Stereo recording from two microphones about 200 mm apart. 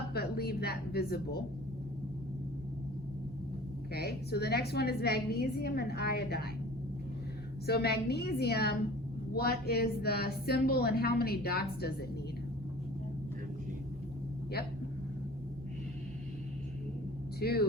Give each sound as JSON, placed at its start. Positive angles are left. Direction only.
{"t": 0.1, "sound": "a woman's voice", "side_deg": 50}
{"t": 3.9, "sound": "a woman's voice", "side_deg": 55}
{"t": 7.7, "sound": "a woman's voice", "side_deg": 55}
{"t": 17.4, "sound": "a woman's voice", "side_deg": 50}